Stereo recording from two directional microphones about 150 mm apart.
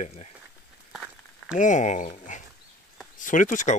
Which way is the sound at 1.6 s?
55° left (ahead or behind).